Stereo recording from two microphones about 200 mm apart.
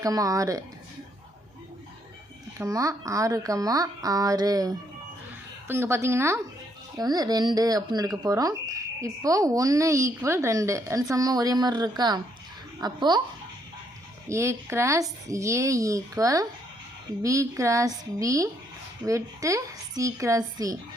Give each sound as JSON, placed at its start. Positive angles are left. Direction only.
{"t": 0.0, "sound": "a woman's voice", "side_deg": -15}
{"t": 2.6, "sound": "a woman's voice", "side_deg": -15}
{"t": 14.3, "sound": "a woman's voice", "side_deg": -15}